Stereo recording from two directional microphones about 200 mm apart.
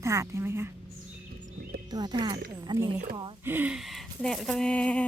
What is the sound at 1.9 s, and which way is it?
Speech, 20° right (ahead or behind).